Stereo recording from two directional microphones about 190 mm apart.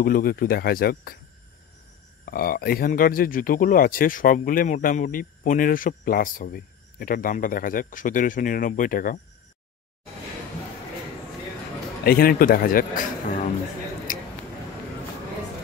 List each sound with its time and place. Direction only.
0.0 s speech: 50° left (ahead or behind)
2.2 s speech: 50° left (ahead or behind)
12.0 s speech: 50° left (ahead or behind)
14.1 s squish: 45° left (ahead or behind)